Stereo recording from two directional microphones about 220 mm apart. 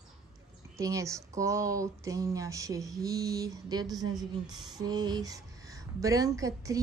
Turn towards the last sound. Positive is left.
turn(degrees=-15)  # may be behind; listen again after turning